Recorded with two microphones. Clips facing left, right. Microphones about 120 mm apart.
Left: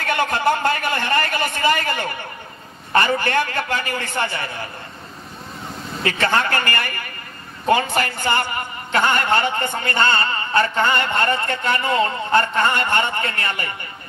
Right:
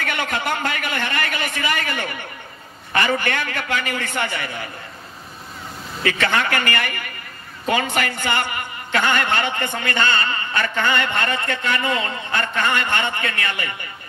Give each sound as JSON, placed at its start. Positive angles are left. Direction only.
{"t": 0.0, "sound": "a woman's voice", "side_deg": 35}
{"t": 6.2, "sound": "a woman's voice", "side_deg": 35}